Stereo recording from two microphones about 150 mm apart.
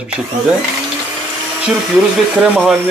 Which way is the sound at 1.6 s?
5° right (ahead or behind).